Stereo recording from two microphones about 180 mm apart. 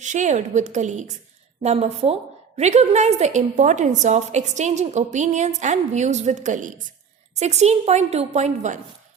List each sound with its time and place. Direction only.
0.0 s a woman's voice: 45° right (ahead or behind)